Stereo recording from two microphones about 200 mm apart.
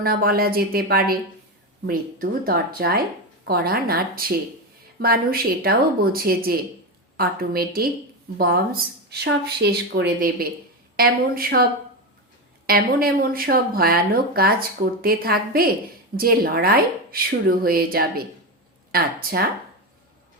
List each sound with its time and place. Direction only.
0.0 s speech: 50° right (ahead or behind)